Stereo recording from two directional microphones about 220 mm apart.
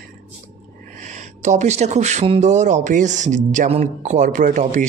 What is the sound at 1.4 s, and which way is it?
Speech, 30° right (ahead or behind).